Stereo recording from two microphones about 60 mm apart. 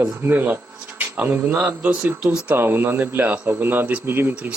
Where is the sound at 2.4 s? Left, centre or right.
Right.